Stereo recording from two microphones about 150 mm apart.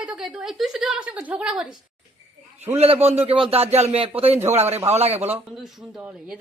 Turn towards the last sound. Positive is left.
turn(degrees=-45)  # may be behind; listen again after turning